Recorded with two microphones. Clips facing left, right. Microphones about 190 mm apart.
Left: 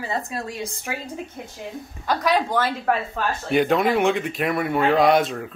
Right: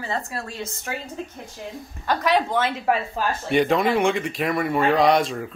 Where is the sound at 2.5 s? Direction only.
10° right (ahead or behind).